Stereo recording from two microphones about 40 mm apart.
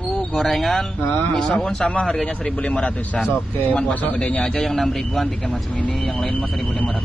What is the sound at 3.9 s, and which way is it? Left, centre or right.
Speech, left.